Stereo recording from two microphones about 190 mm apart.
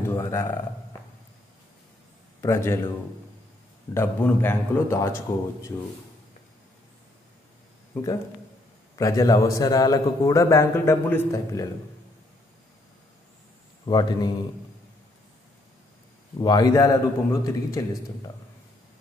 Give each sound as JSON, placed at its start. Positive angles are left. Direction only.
{"t": 0.1, "sound": "speech", "side_deg": 15}
{"t": 2.4, "sound": "a man's voice", "side_deg": 15}
{"t": 3.9, "sound": "a man's voice", "side_deg": 10}
{"t": 7.9, "sound": "a man's voice", "side_deg": 20}
{"t": 13.8, "sound": "a man's voice", "side_deg": 20}
{"t": 16.3, "sound": "a man's voice", "side_deg": 20}